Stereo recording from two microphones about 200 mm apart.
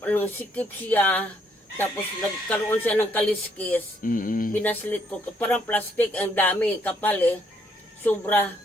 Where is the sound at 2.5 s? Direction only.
10° left (ahead or behind).